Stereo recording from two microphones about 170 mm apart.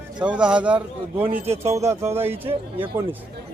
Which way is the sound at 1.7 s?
15° right (ahead or behind).